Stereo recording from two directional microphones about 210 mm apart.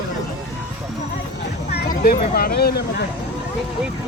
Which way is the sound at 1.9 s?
40° left (ahead or behind).